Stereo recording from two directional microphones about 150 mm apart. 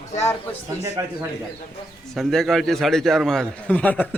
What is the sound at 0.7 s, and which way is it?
Speech, 20° right (ahead or behind).